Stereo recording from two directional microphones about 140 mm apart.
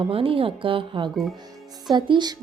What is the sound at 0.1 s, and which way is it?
A woman's voice, 40° right (ahead or behind).